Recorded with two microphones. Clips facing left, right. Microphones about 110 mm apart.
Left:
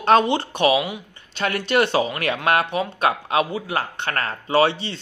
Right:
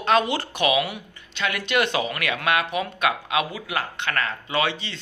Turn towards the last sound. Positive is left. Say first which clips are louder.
# left 7 dB
turn(degrees=35)  # may be behind; listen again after turning